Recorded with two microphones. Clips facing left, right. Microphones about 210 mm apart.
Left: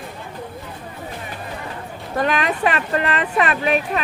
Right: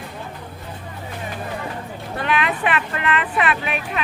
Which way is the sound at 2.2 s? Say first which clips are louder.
Left 3 dB; 40° left (ahead or behind).